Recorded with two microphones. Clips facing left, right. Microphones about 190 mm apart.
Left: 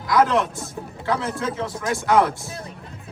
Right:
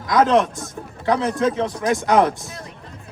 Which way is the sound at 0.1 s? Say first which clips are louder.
Right 3 dB; 20° right (ahead or behind).